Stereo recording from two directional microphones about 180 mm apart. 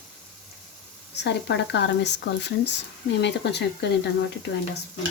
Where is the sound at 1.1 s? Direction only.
75° left (ahead or behind).